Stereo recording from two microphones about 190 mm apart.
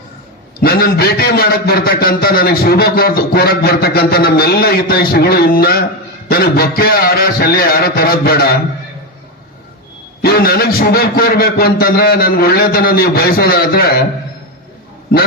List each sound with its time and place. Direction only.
0.6 s a man's voice: 55° left (ahead or behind)
10.2 s a man's voice: 55° left (ahead or behind)